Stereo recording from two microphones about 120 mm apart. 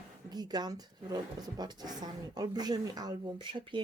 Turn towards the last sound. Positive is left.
turn(degrees=-40)  # may be behind; listen again after turning